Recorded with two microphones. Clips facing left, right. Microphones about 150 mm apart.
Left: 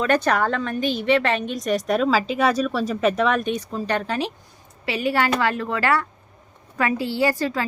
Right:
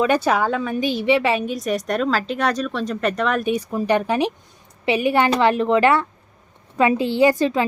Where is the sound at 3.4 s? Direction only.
10° right (ahead or behind).